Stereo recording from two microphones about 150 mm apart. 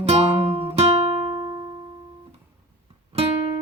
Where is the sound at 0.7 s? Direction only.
40° right (ahead or behind).